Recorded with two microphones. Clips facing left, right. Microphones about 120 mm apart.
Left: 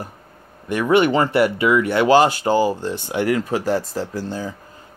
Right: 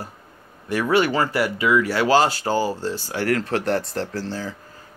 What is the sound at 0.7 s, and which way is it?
Speech, 20° left (ahead or behind).